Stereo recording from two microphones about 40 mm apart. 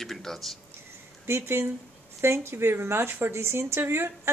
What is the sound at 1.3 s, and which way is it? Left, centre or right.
Speech, right.